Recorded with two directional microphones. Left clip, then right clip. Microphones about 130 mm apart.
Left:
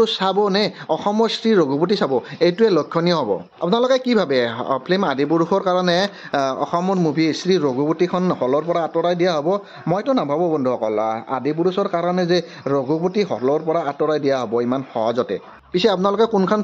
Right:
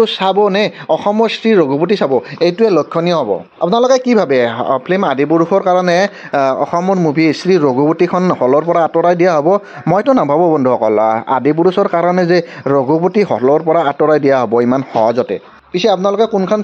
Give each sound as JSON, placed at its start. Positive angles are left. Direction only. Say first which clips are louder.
{"t": 1.4, "sound": "speech", "louder": "right 6 dB", "side_deg": -25}
{"t": 7.2, "sound": "speech", "louder": "right 7 dB", "side_deg": -45}
{"t": 8.2, "sound": "speech", "louder": "right 7 dB", "side_deg": -35}
{"t": 8.5, "sound": "speech", "louder": "right 10 dB", "side_deg": -55}
{"t": 10.1, "sound": "speech", "louder": "right 8 dB", "side_deg": -35}
{"t": 13.3, "sound": "speech", "louder": "right 8 dB", "side_deg": -40}
{"t": 15.7, "sound": "speech", "louder": "right 5 dB", "side_deg": -5}